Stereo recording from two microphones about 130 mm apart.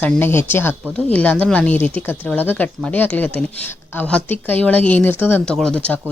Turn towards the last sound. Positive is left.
turn(degrees=10)  # may be behind; listen again after turning